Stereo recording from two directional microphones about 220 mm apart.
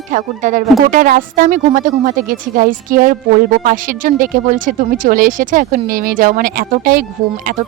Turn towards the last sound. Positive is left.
turn(degrees=-40)  # may be behind; listen again after turning